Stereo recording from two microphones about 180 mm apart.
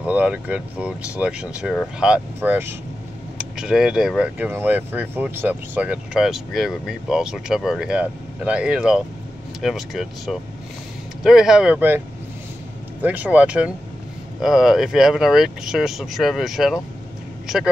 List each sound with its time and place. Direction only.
0.0 s speech: 5° right (ahead or behind)
13.0 s speech: 10° right (ahead or behind)